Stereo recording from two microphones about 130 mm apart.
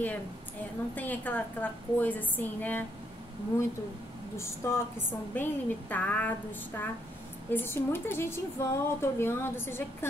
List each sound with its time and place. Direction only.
0.0 s a woman's voice: 15° left (ahead or behind)
4.4 s a woman's voice: 20° left (ahead or behind)
7.5 s a woman's voice: 15° left (ahead or behind)